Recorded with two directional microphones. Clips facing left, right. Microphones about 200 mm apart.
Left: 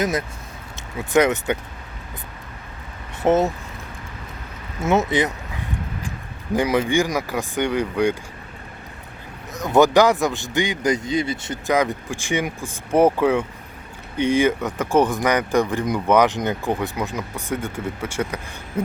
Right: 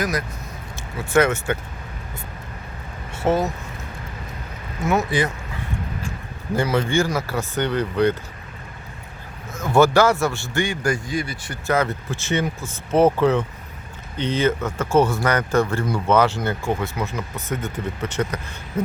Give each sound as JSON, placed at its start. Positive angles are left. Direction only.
{"t": 0.0, "sound": "a man's voice", "side_deg": 25}
{"t": 3.2, "sound": "speech", "side_deg": 20}
{"t": 4.8, "sound": "speech", "side_deg": 25}
{"t": 9.5, "sound": "a man's voice", "side_deg": 20}